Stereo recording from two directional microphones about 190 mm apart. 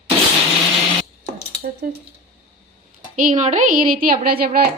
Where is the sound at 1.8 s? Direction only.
50° right (ahead or behind).